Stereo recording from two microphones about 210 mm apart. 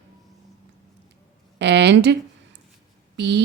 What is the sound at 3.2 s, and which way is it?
Speech, 55° right (ahead or behind).